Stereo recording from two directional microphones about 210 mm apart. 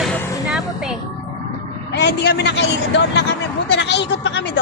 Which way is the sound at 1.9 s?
55° left (ahead or behind).